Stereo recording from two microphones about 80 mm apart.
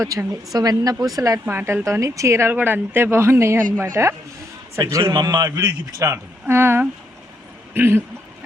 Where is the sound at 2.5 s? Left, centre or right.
Right.